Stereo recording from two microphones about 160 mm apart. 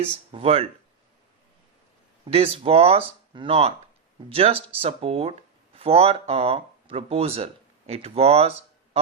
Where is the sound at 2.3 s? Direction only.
35° right (ahead or behind).